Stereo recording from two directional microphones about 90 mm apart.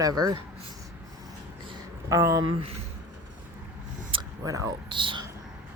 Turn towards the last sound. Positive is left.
turn(degrees=-65)  # may be behind; listen again after turning